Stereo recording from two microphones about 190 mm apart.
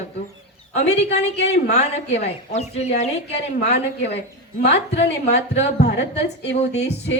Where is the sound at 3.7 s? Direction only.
60° left (ahead or behind).